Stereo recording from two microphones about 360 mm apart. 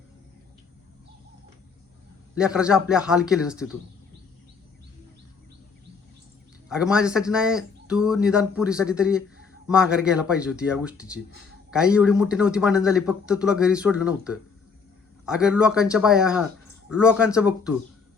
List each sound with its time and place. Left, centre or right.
2.4 s a man's voice: centre
6.7 s a man's voice: centre